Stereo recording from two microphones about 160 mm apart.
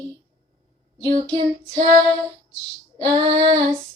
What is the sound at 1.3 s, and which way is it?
Child singing, 30° right (ahead or behind).